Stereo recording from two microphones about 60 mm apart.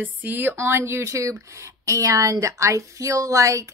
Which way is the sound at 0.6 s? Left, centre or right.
Right.